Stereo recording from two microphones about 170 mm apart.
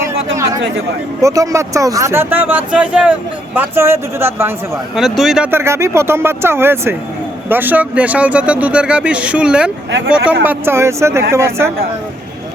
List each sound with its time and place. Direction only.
1.2 s speech: 20° right (ahead or behind)
4.7 s speech: centre (ahead or behind)
5.5 s speech: 15° right (ahead or behind)